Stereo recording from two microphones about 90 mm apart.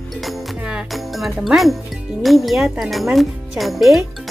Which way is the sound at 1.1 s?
Centre (ahead or behind).